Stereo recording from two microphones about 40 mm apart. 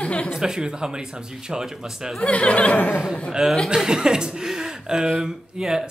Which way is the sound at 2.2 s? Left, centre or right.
Left.